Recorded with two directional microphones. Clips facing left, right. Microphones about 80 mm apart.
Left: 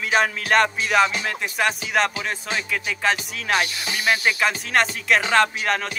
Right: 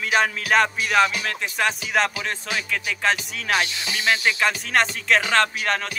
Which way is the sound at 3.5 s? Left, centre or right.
Left.